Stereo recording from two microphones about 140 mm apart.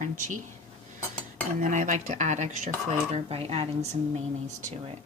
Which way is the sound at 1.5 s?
65° right (ahead or behind).